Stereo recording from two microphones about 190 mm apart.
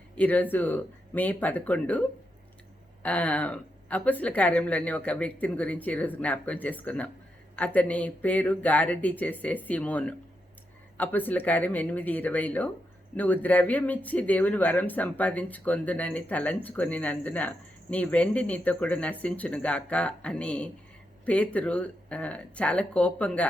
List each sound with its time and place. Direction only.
0.2 s speech: 10° left (ahead or behind)